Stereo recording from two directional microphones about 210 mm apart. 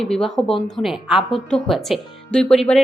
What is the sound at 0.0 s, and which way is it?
Speech, 5° left (ahead or behind).